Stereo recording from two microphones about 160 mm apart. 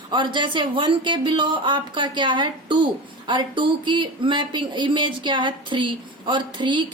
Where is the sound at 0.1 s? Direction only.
30° right (ahead or behind).